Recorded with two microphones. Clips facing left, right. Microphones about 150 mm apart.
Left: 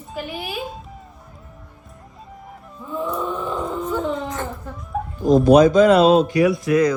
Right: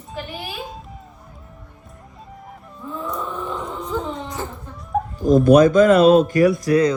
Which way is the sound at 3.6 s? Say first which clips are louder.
Left 3 dB; centre (ahead or behind).